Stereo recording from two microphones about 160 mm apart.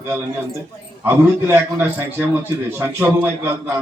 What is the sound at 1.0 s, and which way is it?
A man's voice, 15° right (ahead or behind).